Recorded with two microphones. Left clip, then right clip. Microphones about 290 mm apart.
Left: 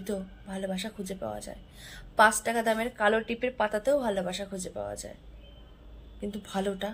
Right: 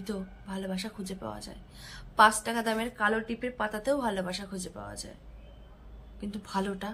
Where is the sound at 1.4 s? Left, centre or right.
Centre.